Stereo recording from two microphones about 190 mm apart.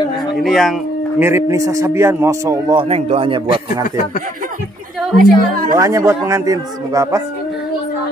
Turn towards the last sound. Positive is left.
turn(degrees=-15)  # may be behind; listen again after turning